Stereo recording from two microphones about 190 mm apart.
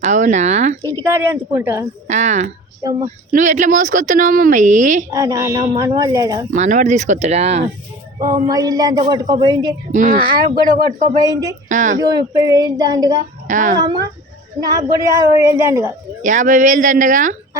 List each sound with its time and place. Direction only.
0.0 s speech: 40° right (ahead or behind)
1.0 s a woman's voice: 10° right (ahead or behind)
2.0 s speech: 40° right (ahead or behind)
5.1 s a woman's voice: 15° right (ahead or behind)
6.5 s speech: 40° right (ahead or behind)
8.4 s speech: 20° right (ahead or behind)
9.9 s speech: 45° right (ahead or behind)
11.1 s speech: 20° right (ahead or behind)
11.7 s speech: 40° right (ahead or behind)
11.9 s speech: 20° right (ahead or behind)
13.5 s speech: 40° right (ahead or behind)
13.7 s a woman's voice: 20° right (ahead or behind)
16.2 s speech: 45° right (ahead or behind)